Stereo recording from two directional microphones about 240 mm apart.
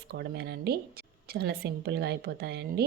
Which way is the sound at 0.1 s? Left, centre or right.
Right.